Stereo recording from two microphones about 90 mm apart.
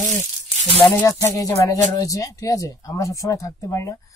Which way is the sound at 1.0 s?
35° left (ahead or behind).